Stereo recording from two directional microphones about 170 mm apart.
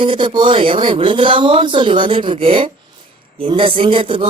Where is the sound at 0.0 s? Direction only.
30° right (ahead or behind).